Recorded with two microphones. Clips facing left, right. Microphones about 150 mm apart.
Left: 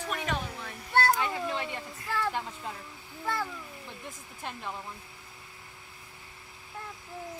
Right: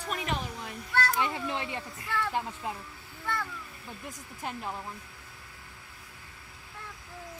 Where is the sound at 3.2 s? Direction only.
35° left (ahead or behind).